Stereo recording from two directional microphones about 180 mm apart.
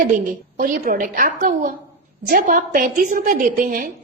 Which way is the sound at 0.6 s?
50° right (ahead or behind).